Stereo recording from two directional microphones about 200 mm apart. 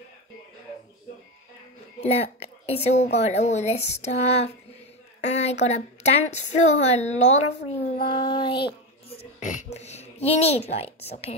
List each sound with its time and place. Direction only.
2.0 s a woman's voice: 30° left (ahead or behind)
8.2 s child singing: 25° left (ahead or behind)
9.4 s a child's voice: 40° left (ahead or behind)